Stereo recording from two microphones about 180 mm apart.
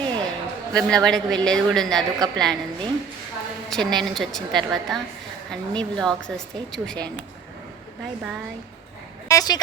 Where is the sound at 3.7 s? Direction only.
Centre (ahead or behind).